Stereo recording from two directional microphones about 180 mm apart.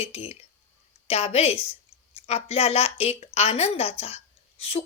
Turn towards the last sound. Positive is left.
turn(degrees=35)  # may be behind; listen again after turning